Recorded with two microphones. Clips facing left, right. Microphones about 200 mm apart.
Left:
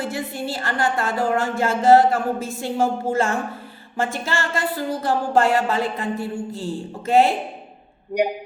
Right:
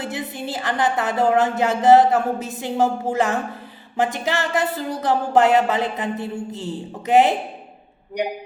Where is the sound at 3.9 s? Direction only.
15° right (ahead or behind).